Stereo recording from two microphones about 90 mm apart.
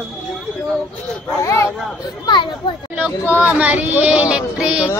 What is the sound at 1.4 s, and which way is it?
Speech, 35° left (ahead or behind).